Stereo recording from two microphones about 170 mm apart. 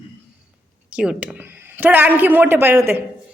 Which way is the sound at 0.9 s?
5° right (ahead or behind).